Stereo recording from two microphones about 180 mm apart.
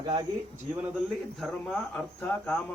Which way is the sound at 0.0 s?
20° right (ahead or behind).